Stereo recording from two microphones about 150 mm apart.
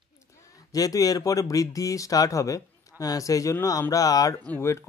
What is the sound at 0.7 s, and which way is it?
Speech, 25° left (ahead or behind).